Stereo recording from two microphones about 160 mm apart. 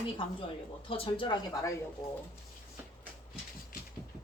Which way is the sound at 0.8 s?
35° left (ahead or behind).